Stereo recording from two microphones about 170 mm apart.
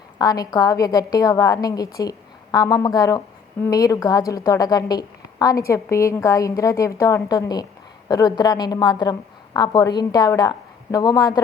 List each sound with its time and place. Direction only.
0.2 s a woman's voice: 20° left (ahead or behind)